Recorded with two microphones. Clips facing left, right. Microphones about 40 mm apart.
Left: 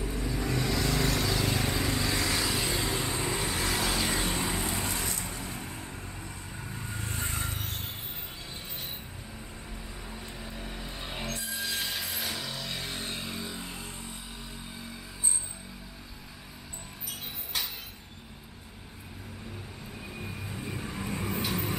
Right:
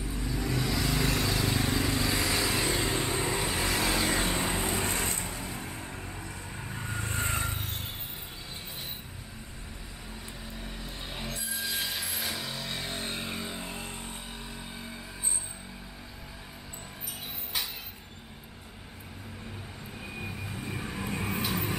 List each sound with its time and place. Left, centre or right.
0.0 s vehicle: centre
4.6 s vehicle: right
5.3 s vehicle: centre
7.1 s vehicle: right
7.4 s a sound: centre
10.4 s vehicle: centre
11.2 s music: centre
12.7 s a sound: centre
13.4 s vehicle: right
20.2 s vehicle: centre